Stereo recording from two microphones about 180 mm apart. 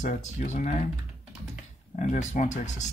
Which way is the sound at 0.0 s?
45° left (ahead or behind).